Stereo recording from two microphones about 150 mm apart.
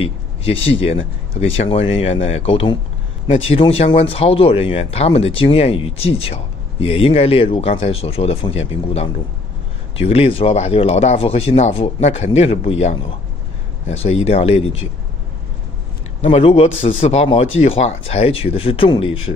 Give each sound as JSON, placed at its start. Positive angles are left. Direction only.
{"t": 0.0, "sound": "speech", "side_deg": 40}
{"t": 16.2, "sound": "speech", "side_deg": 45}